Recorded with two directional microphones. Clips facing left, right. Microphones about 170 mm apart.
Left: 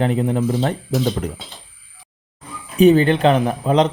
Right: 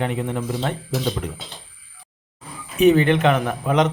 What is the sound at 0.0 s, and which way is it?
Speech, 35° left (ahead or behind).